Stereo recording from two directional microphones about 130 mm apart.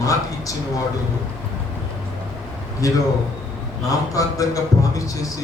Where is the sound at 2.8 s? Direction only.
25° left (ahead or behind).